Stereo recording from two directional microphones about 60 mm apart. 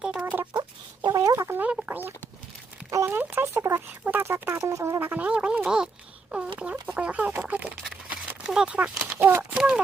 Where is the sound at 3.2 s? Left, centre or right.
Right.